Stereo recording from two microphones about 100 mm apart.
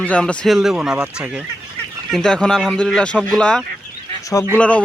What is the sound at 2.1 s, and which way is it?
Speech, 5° left (ahead or behind).